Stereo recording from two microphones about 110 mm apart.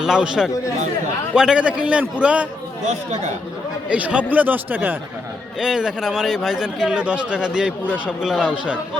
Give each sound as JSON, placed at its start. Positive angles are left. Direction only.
{"t": 0.0, "sound": "speech", "side_deg": -5}
{"t": 2.8, "sound": "speech", "side_deg": -90}
{"t": 3.8, "sound": "speech", "side_deg": -10}
{"t": 5.5, "sound": "speech", "side_deg": -5}